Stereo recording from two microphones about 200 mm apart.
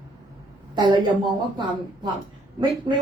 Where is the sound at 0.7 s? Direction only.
20° right (ahead or behind).